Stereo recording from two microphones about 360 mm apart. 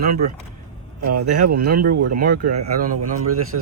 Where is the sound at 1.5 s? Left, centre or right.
Right.